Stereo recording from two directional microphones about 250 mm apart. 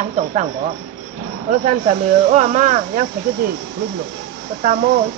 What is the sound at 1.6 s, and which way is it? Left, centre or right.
Speech, right.